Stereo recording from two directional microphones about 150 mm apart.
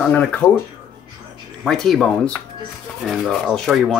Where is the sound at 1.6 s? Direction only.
Centre (ahead or behind).